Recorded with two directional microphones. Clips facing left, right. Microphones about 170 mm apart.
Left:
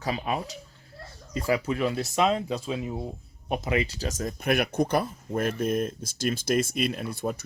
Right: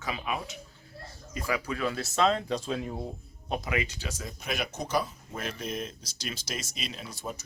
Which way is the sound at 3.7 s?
35° left (ahead or behind).